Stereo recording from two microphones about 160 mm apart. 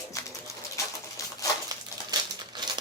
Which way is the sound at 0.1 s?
20° left (ahead or behind).